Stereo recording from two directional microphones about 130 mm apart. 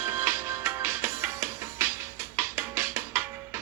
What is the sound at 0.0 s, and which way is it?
Music, 20° right (ahead or behind).